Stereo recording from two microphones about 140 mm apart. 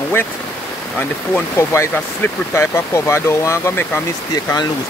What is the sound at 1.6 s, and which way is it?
Speech, 20° left (ahead or behind).